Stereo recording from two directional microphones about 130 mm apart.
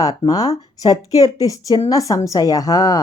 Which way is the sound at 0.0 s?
30° left (ahead or behind).